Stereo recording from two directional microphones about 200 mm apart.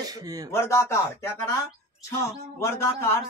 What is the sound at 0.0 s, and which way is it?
Speech, 20° right (ahead or behind).